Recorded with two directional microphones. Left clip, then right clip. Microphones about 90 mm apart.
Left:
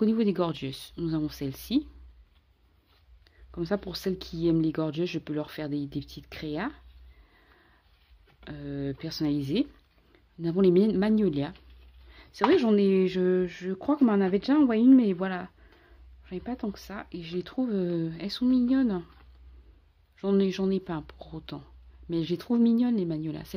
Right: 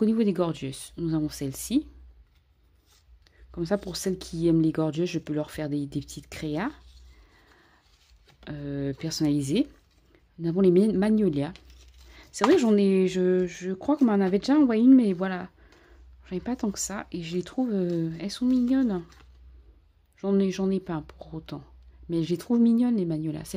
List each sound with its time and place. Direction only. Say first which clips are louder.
0.0 s speech: right 1 dB; 25° right (ahead or behind)
3.3 s speech: right 2 dB; 30° right (ahead or behind)
8.5 s speech: right 3 dB; 40° right (ahead or behind)
10.1 s speech: right 1 dB; 25° right (ahead or behind)
12.1 s a sound: right 1 dB; 40° right (ahead or behind)
12.4 s speech: right 1 dB; 30° right (ahead or behind)
16.3 s speech: right 4 dB; 50° right (ahead or behind); by 19.0 s 20° right (ahead or behind)
20.2 s speech: even; 25° right (ahead or behind)